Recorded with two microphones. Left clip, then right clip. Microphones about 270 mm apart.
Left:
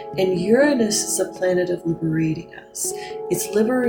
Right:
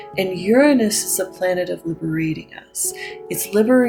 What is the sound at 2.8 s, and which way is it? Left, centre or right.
Speech, right.